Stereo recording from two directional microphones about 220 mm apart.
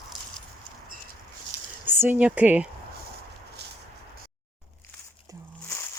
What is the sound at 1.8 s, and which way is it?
Speech, 10° right (ahead or behind).